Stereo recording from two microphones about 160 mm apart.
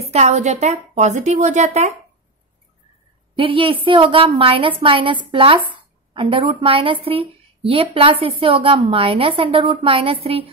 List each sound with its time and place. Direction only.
0.0 s a woman's voice: 45° right (ahead or behind)
3.3 s a woman's voice: 35° right (ahead or behind)